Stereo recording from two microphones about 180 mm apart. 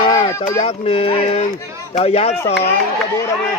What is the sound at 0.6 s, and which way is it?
Speech, 35° left (ahead or behind).